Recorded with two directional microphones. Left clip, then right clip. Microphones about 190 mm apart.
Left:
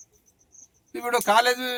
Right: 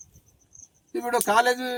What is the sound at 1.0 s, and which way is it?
Speech, 15° left (ahead or behind).